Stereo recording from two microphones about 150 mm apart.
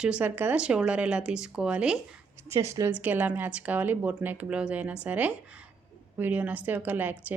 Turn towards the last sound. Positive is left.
turn(degrees=-10)  # may be behind; listen again after turning